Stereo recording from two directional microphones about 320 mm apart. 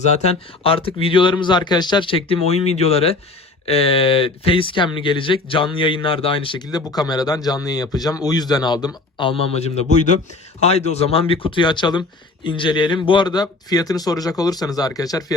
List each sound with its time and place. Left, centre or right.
0.0 s speech: centre